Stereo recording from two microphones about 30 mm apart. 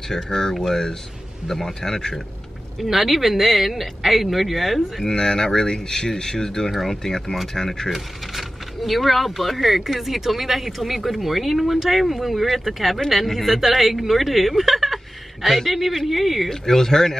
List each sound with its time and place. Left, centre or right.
0.1 s speech: centre
2.8 s speech: centre
5.0 s speech: left
7.9 s speech: centre
16.4 s speech: centre